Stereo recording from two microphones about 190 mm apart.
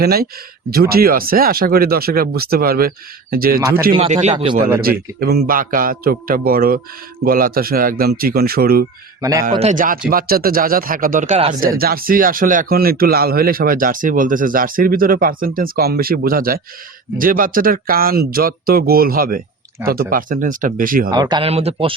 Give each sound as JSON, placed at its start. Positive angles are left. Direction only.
{"t": 0.0, "sound": "speech", "side_deg": -55}
{"t": 3.9, "sound": "speech", "side_deg": -35}
{"t": 4.8, "sound": "speech", "side_deg": -55}
{"t": 9.6, "sound": "speech", "side_deg": -40}
{"t": 11.8, "sound": "speech", "side_deg": -50}
{"t": 21.1, "sound": "speech", "side_deg": -20}